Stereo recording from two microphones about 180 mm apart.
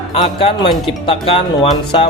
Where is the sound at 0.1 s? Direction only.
30° left (ahead or behind).